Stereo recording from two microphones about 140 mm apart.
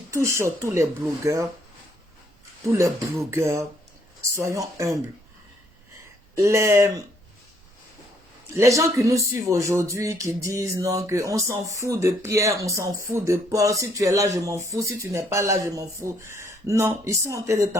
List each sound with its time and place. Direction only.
0.1 s speech: 20° right (ahead or behind)
2.7 s speech: 20° right (ahead or behind)
6.3 s speech: 20° right (ahead or behind)
8.5 s speech: 20° right (ahead or behind)